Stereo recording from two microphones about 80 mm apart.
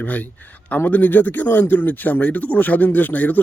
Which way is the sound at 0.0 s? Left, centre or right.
Left.